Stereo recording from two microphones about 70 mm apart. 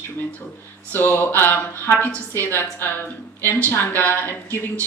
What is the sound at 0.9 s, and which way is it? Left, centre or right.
Speech, left.